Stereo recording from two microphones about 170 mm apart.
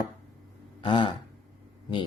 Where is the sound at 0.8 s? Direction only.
30° left (ahead or behind).